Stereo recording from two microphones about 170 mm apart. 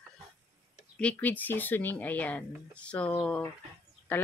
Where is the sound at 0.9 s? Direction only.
10° left (ahead or behind).